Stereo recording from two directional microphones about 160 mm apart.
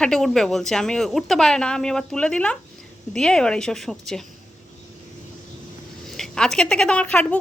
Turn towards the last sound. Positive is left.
turn(degrees=5)  # may be behind; listen again after turning